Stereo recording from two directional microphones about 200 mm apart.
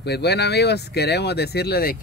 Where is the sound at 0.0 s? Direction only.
55° left (ahead or behind).